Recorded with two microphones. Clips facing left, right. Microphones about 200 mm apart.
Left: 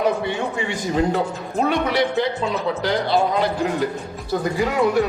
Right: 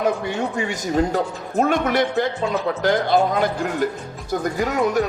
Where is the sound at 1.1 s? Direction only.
45° right (ahead or behind).